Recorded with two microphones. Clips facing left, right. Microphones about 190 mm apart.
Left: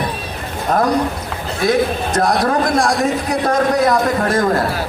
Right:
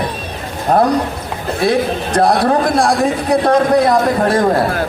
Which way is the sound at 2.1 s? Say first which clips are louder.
Right 4 dB; 30° right (ahead or behind).